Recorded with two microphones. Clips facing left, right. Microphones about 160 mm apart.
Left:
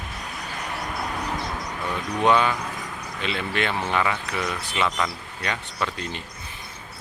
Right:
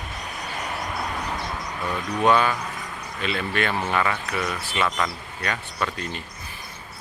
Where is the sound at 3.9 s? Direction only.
20° left (ahead or behind).